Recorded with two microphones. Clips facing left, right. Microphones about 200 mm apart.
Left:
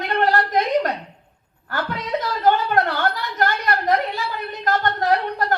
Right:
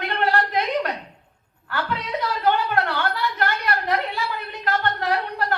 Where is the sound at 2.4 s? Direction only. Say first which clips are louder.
Left 4 dB; 50° left (ahead or behind).